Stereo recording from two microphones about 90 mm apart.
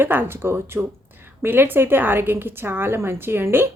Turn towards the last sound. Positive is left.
turn(degrees=-25)  # may be behind; listen again after turning